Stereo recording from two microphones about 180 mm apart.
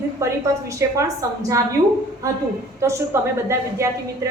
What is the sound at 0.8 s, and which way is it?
Speech, 15° right (ahead or behind).